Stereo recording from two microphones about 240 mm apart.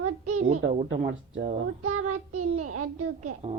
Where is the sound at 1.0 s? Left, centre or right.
Right.